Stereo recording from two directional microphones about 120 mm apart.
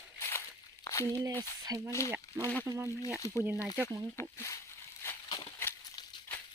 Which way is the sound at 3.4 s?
15° right (ahead or behind).